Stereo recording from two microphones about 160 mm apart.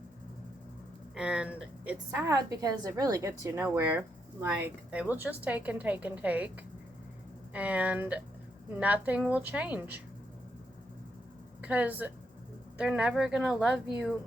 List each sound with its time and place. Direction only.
1.1 s a woman's voice: 5° right (ahead or behind)
2.0 s a woman's voice: 20° right (ahead or behind)
7.5 s a woman's voice: 10° right (ahead or behind)
11.6 s a woman's voice: 10° right (ahead or behind)